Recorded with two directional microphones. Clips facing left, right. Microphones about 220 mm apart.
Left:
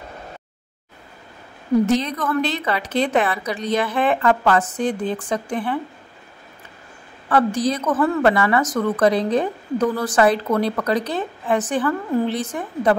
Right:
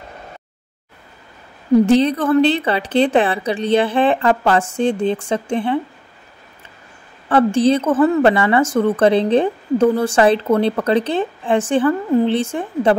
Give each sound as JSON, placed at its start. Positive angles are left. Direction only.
{"t": 1.9, "sound": "a woman's voice", "side_deg": -30}
{"t": 7.2, "sound": "a woman's voice", "side_deg": -25}